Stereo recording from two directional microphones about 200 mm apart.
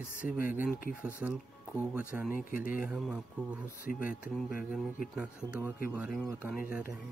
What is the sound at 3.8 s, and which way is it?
Speech, 45° left (ahead or behind).